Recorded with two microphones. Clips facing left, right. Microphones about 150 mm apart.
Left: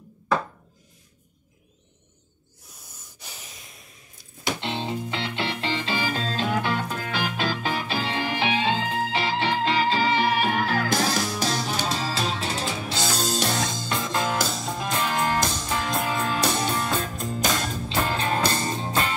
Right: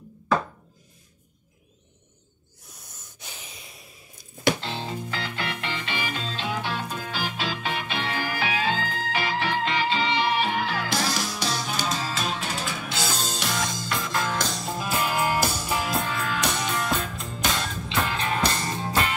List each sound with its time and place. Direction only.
3.3 s snort: centre (ahead or behind)
4.6 s music: 25° left (ahead or behind); by 7.4 s 60° left (ahead or behind)
7.6 s music: 35° left (ahead or behind)
11.8 s music: 30° left (ahead or behind)
14.2 s music: 5° left (ahead or behind); by 16.0 s 10° right (ahead or behind)
16.2 s music: 30° left (ahead or behind)